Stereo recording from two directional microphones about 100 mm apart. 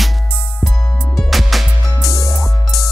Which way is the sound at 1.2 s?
Centre (ahead or behind).